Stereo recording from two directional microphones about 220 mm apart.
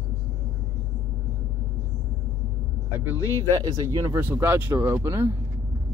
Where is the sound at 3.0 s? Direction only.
10° right (ahead or behind).